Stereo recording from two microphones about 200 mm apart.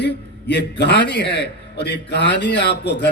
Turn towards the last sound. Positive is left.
turn(degrees=55)  # may be behind; listen again after turning